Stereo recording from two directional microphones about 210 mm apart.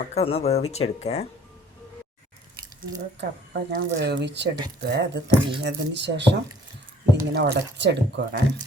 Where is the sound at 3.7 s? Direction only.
55° right (ahead or behind).